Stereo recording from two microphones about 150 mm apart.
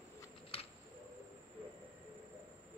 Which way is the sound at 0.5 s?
40° left (ahead or behind).